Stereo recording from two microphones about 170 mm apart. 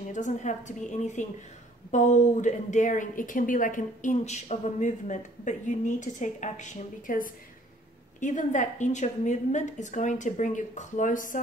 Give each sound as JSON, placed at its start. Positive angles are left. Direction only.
{"t": 0.1, "sound": "a woman's voice", "side_deg": 45}